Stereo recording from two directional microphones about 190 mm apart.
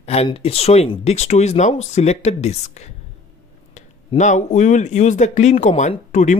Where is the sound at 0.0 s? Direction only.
30° left (ahead or behind).